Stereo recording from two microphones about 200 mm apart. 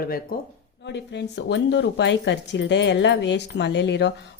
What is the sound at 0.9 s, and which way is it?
Speech, 60° left (ahead or behind).